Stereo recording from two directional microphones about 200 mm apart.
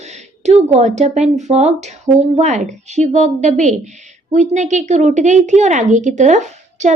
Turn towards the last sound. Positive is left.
turn(degrees=-35)  # may be behind; listen again after turning